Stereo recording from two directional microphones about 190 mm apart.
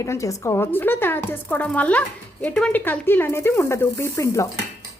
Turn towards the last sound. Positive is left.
turn(degrees=15)  # may be behind; listen again after turning